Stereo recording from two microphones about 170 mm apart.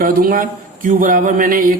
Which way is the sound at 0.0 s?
55° right (ahead or behind).